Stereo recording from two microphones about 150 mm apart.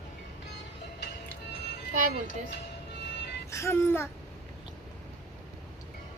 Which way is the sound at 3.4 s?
20° left (ahead or behind).